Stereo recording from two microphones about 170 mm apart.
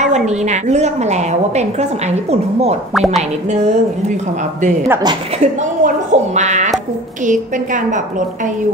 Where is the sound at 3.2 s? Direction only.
40° right (ahead or behind).